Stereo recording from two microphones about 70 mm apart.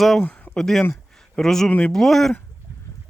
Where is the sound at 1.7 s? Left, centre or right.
Left.